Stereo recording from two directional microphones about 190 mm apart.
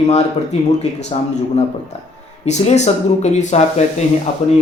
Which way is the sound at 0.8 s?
35° left (ahead or behind).